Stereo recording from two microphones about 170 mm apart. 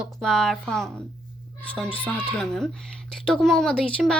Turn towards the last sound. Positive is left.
turn(degrees=5)  # may be behind; listen again after turning